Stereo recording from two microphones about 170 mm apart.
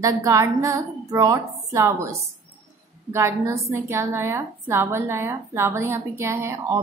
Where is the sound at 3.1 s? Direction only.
15° right (ahead or behind).